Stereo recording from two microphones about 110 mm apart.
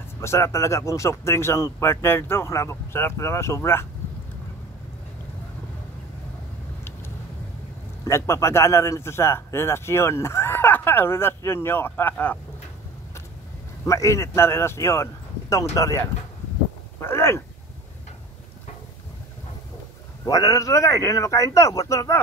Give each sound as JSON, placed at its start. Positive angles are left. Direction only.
{"t": 0.2, "sound": "speech", "side_deg": 25}
{"t": 8.0, "sound": "speech", "side_deg": 25}
{"t": 13.8, "sound": "speech", "side_deg": 30}
{"t": 20.2, "sound": "speech", "side_deg": 35}